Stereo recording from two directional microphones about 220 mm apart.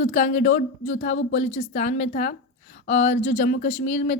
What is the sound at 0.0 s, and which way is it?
A woman's voice, 30° left (ahead or behind).